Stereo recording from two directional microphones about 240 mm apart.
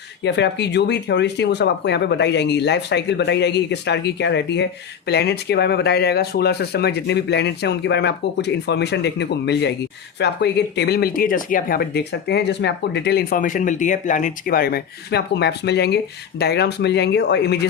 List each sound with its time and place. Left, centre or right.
0.3 s speech: left